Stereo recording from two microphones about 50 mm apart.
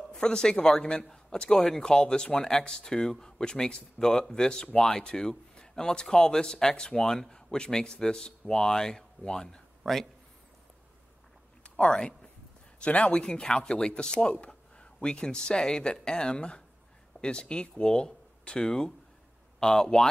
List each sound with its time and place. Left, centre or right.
0.1 s speech: centre
9.8 s speech: centre
11.6 s a sound: left
12.8 s speech: left